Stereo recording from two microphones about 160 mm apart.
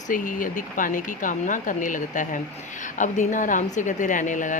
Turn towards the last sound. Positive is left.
turn(degrees=50)  # may be behind; listen again after turning